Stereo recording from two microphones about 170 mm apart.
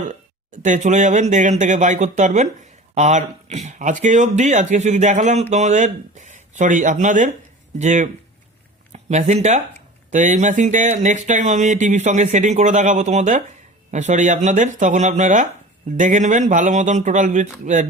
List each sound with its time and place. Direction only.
0.6 s speech: 45° right (ahead or behind)